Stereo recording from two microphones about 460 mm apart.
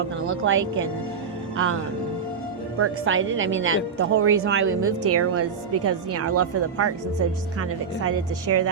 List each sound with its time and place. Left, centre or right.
0.4 s a woman's voice: right
2.7 s a woman's voice: right
8.0 s a woman's voice: right